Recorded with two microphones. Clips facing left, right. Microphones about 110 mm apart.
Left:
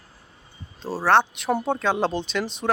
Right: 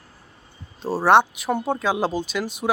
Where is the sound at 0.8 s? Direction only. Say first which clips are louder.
Right 3 dB; 15° right (ahead or behind).